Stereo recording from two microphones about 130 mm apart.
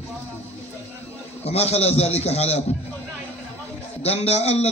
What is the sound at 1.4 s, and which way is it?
Speech, 55° left (ahead or behind).